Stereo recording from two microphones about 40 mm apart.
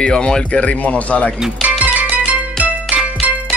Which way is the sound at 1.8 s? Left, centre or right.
Right.